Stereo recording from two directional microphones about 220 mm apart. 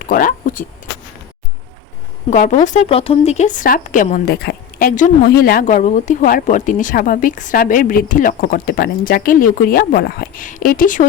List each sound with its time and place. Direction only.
0.1 s speech: 35° left (ahead or behind)
2.3 s speech: 35° left (ahead or behind)